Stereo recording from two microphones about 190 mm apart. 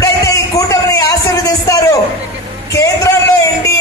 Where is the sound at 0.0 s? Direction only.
15° left (ahead or behind).